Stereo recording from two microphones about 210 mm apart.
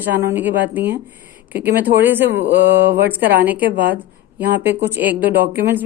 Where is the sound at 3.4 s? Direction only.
10° right (ahead or behind).